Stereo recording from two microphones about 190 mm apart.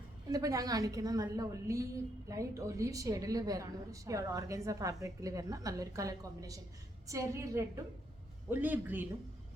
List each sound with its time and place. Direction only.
0.3 s a woman's voice: 20° right (ahead or behind)